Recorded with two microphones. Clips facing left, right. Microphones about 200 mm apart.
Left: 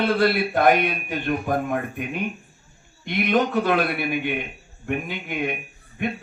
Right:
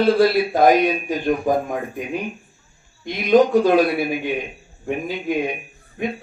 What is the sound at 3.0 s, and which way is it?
Speech, 60° left (ahead or behind).